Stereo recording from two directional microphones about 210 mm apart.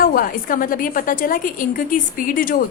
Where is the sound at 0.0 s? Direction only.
45° left (ahead or behind).